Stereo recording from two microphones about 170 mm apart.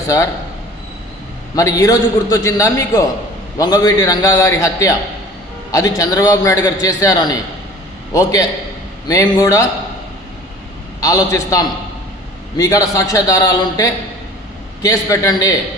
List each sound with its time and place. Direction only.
1.5 s a man's voice: 20° left (ahead or behind)
11.0 s a man's voice: 20° left (ahead or behind)